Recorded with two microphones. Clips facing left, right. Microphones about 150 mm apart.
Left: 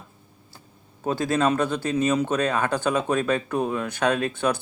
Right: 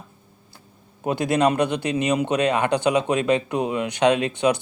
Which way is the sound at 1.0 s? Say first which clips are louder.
Right 2 dB; 15° right (ahead or behind).